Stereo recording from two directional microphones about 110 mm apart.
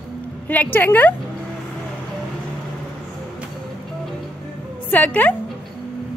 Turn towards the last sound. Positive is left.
turn(degrees=15)  # may be behind; listen again after turning